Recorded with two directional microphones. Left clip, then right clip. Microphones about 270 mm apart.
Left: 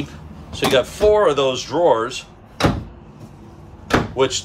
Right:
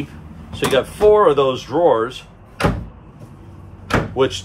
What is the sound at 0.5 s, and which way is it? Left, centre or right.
Speech, centre.